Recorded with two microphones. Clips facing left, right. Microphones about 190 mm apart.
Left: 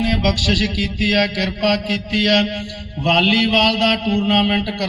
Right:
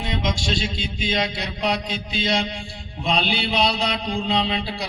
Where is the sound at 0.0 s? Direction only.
85° left.